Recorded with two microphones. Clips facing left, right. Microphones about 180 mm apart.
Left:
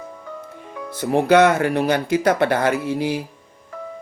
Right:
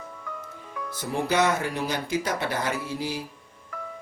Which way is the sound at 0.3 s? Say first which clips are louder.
Left 5 dB; 30° left (ahead or behind).